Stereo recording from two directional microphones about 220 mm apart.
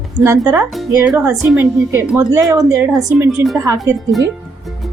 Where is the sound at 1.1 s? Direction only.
5° right (ahead or behind).